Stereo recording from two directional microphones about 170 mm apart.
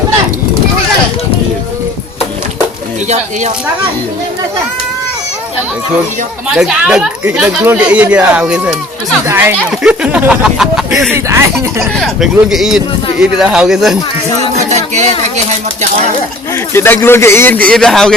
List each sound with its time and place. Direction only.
6.6 s speech: 5° right (ahead or behind)
11.1 s speech: 15° right (ahead or behind)
11.5 s speech: centre (ahead or behind)
14.5 s speech: 40° right (ahead or behind)
16.7 s speech: 15° left (ahead or behind)